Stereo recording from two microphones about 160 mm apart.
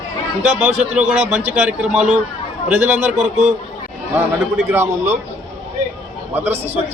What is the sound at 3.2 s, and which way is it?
Speech, 45° right (ahead or behind).